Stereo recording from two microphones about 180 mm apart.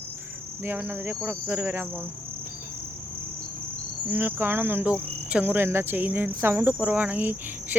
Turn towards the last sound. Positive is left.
turn(degrees=-10)  # may be behind; listen again after turning